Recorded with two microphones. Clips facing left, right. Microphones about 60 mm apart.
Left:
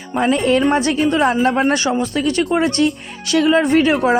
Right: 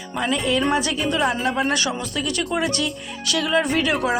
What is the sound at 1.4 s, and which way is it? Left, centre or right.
Speech, left.